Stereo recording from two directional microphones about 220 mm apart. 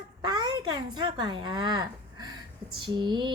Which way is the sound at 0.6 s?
20° right (ahead or behind).